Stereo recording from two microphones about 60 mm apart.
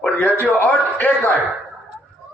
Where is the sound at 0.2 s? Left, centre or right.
Left.